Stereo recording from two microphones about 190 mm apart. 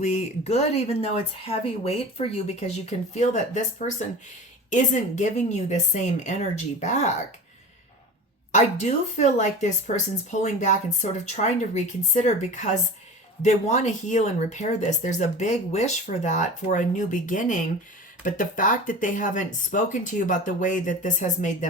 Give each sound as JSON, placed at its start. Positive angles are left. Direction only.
{"t": 0.0, "sound": "speech", "side_deg": 35}
{"t": 8.5, "sound": "speech", "side_deg": 40}